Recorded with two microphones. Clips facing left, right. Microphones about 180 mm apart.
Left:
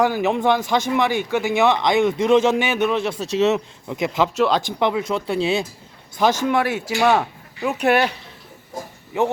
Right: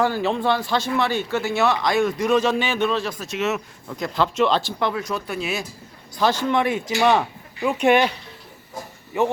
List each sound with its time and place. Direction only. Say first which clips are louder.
0.0 s a man's voice: left 3 dB; 15° left (ahead or behind); by 3.6 s 30° left (ahead or behind)
3.8 s speech: left 2 dB; 20° left (ahead or behind)
6.4 s a man's voice: left 1 dB; 5° left (ahead or behind)